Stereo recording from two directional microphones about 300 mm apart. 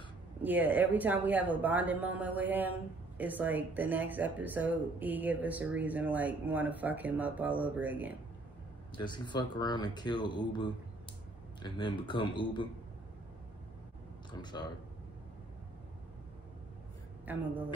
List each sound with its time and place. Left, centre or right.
0.4 s speech: centre
8.9 s speech: centre
14.4 s speech: centre
17.3 s speech: centre